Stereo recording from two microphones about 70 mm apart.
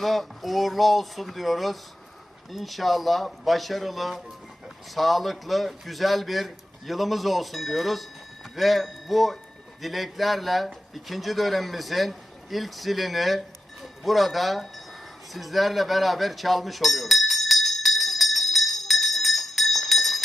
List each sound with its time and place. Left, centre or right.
0.0 s speech: centre
15.3 s chink: centre